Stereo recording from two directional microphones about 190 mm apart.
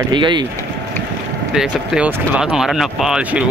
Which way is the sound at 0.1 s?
25° right (ahead or behind).